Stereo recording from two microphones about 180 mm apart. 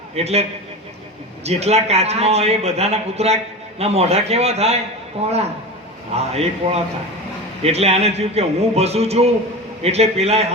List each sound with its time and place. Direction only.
0.2 s a man's voice: 35° right (ahead or behind)
1.5 s a man's voice: 35° right (ahead or behind)